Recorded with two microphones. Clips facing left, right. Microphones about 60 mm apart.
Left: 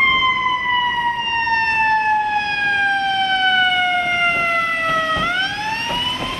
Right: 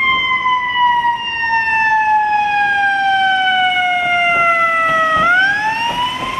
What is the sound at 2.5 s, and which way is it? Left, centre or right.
Emergency vehicle, centre.